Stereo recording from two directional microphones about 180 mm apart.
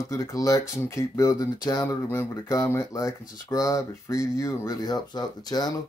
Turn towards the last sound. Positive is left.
turn(degrees=20)  # may be behind; listen again after turning